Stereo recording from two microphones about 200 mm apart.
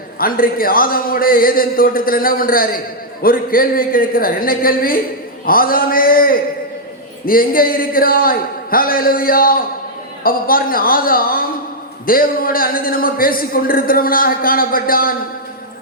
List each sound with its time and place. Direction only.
0.2 s a man's voice: 45° left (ahead or behind)